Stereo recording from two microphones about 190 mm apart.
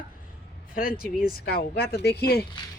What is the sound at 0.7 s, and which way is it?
Speech, 50° left (ahead or behind).